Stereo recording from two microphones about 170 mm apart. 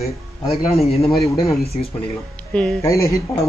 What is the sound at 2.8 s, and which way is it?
Speech, 20° left (ahead or behind).